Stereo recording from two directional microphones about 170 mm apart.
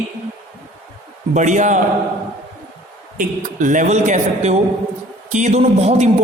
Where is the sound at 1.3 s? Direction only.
45° right (ahead or behind).